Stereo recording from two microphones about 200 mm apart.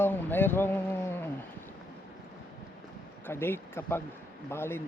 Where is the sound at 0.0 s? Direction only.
10° left (ahead or behind).